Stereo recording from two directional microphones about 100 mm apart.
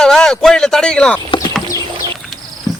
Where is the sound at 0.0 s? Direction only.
5° left (ahead or behind).